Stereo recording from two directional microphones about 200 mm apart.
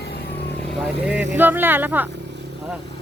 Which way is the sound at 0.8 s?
5° right (ahead or behind).